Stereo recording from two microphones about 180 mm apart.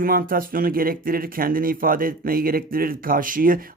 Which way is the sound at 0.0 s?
50° right (ahead or behind).